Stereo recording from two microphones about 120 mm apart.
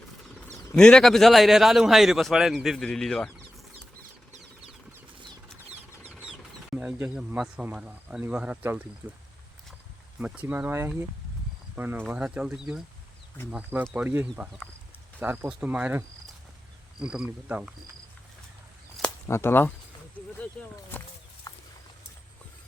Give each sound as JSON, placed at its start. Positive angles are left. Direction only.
{"t": 0.8, "sound": "a man's voice", "side_deg": 5}
{"t": 6.1, "sound": "speech", "side_deg": -10}
{"t": 10.2, "sound": "speech", "side_deg": -10}
{"t": 19.3, "sound": "speech", "side_deg": 20}
{"t": 20.2, "sound": "a sound", "side_deg": 10}
{"t": 21.5, "sound": "clip-clop", "side_deg": 35}